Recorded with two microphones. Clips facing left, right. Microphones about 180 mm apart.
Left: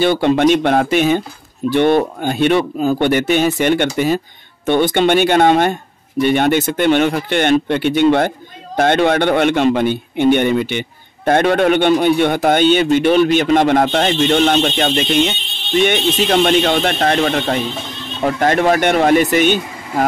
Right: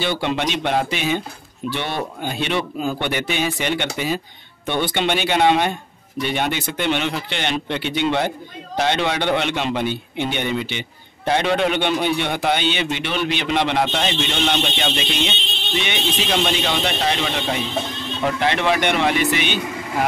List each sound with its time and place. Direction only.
0.0 s a man's voice: 50° left (ahead or behind)